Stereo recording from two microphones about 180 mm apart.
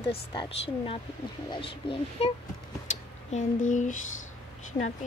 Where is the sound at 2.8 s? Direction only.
45° left (ahead or behind).